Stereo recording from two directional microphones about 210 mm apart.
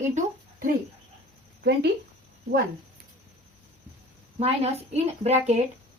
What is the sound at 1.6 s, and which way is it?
Speech, 50° right (ahead or behind).